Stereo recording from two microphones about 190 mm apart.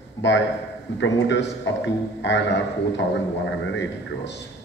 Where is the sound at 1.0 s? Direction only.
70° left (ahead or behind).